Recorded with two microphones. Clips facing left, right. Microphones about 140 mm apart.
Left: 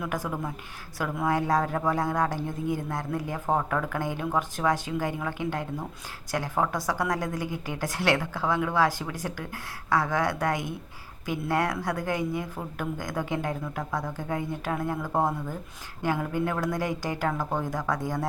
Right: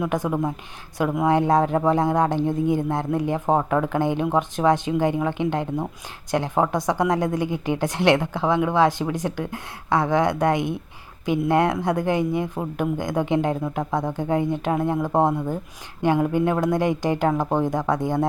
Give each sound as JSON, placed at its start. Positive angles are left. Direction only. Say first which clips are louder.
{"t": 0.0, "sound": "speech", "louder": "right 8 dB", "side_deg": -20}